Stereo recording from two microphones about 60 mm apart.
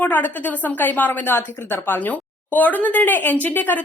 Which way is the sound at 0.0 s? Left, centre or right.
Left.